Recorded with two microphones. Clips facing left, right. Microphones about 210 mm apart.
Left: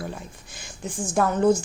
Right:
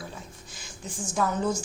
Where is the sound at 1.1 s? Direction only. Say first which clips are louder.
Left 7 dB; 60° left (ahead or behind).